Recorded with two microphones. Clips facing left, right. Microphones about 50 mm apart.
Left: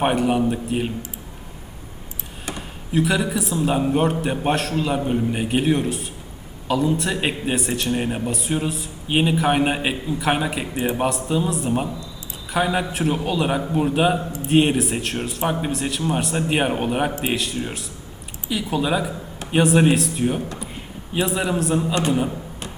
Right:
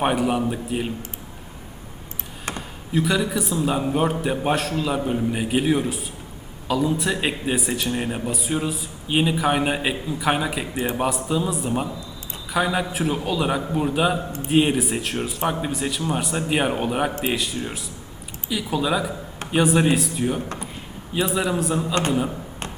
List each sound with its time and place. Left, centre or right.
0.2 s a man's voice: centre
2.9 s a man's voice: centre